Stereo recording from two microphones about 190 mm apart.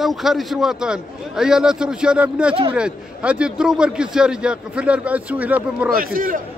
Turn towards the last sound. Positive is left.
turn(degrees=-50)  # may be behind; listen again after turning